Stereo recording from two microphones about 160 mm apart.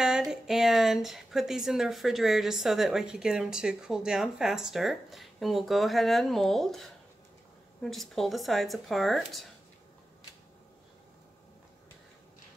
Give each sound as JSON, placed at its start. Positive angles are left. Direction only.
{"t": 0.0, "sound": "speech", "side_deg": -5}